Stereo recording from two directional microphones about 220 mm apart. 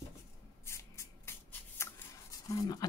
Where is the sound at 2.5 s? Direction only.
15° left (ahead or behind).